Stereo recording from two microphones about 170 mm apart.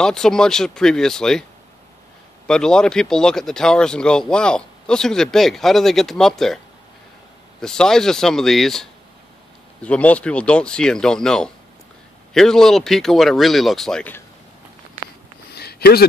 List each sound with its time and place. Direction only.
0.0 s speech: 5° left (ahead or behind)
2.4 s speech: 5° left (ahead or behind)
7.6 s speech: 5° left (ahead or behind)
15.5 s a sound: 70° left (ahead or behind)